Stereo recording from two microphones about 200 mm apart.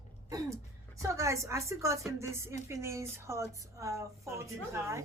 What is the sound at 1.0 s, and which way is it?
Speech, 15° right (ahead or behind).